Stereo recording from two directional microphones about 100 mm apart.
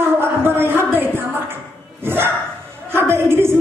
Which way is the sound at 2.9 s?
25° right (ahead or behind).